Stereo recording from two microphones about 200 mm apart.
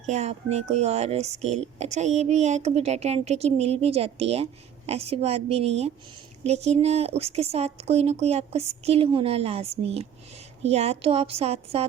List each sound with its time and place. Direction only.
0.0 s speech: 35° right (ahead or behind)